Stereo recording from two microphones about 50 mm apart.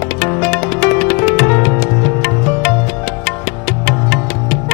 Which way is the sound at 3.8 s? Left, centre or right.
Centre.